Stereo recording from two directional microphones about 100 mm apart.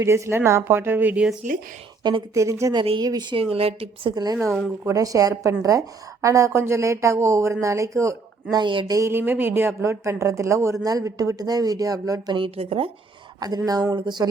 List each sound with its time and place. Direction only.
0.0 s speech: 30° right (ahead or behind); by 1.4 s 10° right (ahead or behind)
2.3 s speech: 30° right (ahead or behind)
3.0 s speech: 45° right (ahead or behind)
3.3 s a woman's voice: 70° right (ahead or behind)
4.1 s speech: 40° right (ahead or behind)
4.4 s speech: centre (ahead or behind)
4.9 s speech: 35° right (ahead or behind)
8.5 s speech: 55° right (ahead or behind)
8.9 s speech: 30° right (ahead or behind)
12.5 s a woman's voice: 70° right (ahead or behind)
13.7 s speech: 40° right (ahead or behind)